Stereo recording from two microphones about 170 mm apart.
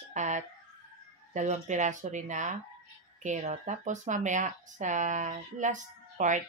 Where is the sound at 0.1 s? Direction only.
45° right (ahead or behind).